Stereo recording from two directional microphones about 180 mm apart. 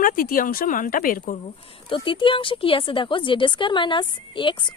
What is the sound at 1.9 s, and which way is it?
Speech, 30° left (ahead or behind).